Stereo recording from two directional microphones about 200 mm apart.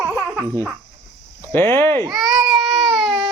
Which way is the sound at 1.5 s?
10° left (ahead or behind).